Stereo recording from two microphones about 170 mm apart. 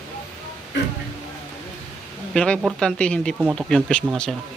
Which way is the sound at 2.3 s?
5° left (ahead or behind).